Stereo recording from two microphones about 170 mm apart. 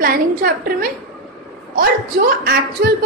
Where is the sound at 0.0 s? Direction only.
60° right (ahead or behind).